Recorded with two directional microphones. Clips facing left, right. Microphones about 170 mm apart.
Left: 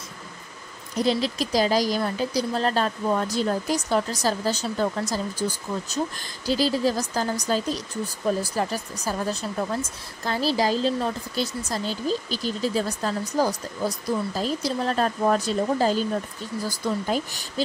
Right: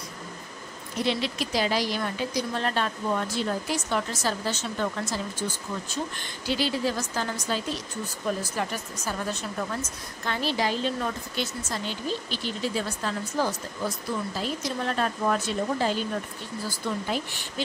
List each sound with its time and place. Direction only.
0.9 s speech: 40° left (ahead or behind)